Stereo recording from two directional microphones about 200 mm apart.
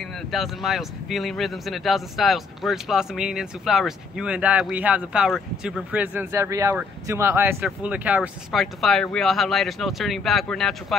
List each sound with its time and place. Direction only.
0.0 s speech: centre (ahead or behind)